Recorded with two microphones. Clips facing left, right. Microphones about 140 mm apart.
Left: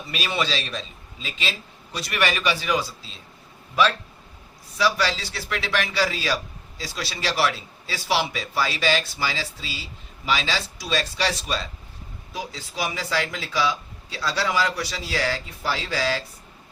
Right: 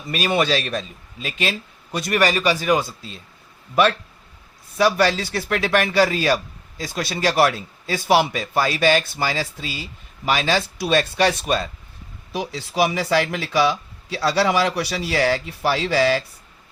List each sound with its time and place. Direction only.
0.1 s a man's voice: 50° right (ahead or behind)
4.8 s a man's voice: 50° right (ahead or behind)
12.3 s speech: 75° right (ahead or behind)